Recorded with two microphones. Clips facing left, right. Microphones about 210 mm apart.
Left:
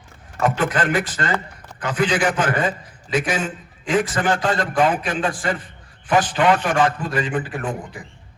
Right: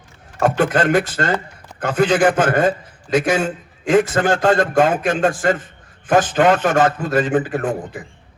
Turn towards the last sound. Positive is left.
turn(degrees=-45)  # may be behind; listen again after turning